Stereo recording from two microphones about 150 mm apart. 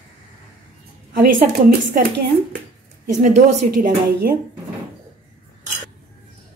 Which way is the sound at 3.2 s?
55° right (ahead or behind).